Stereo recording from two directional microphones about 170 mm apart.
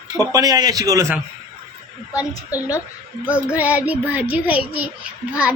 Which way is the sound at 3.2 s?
15° left (ahead or behind).